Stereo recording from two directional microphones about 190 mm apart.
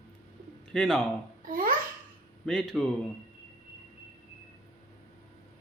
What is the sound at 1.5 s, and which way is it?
Babbling, 45° right (ahead or behind).